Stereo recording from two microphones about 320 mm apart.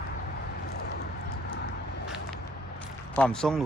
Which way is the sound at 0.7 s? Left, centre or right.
Left.